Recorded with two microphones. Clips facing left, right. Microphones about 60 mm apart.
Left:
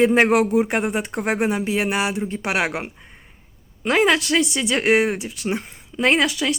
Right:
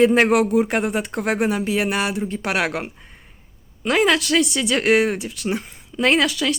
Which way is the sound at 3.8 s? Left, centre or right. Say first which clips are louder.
Even; left.